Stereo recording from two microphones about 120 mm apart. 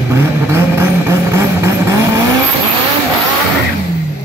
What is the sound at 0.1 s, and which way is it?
Vehicle, 25° right (ahead or behind).